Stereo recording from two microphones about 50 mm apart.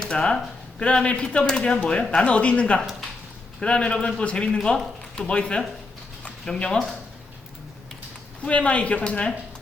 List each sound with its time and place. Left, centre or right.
0.0 s a man's voice: centre
8.4 s a man's voice: left